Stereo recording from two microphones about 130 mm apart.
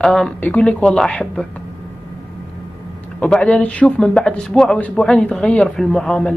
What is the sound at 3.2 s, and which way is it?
A man's voice, 10° left (ahead or behind).